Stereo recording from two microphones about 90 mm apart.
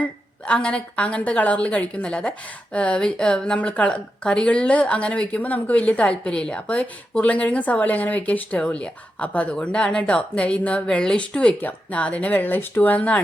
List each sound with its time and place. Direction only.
0.0 s a woman's voice: 15° left (ahead or behind)